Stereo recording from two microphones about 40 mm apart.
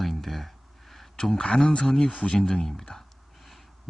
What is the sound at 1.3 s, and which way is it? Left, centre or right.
Speech, left.